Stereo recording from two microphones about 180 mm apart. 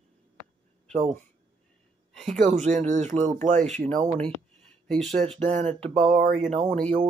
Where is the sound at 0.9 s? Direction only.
35° right (ahead or behind).